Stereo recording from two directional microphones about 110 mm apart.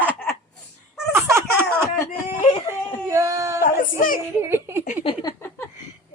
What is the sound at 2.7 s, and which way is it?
Whimper, 25° right (ahead or behind).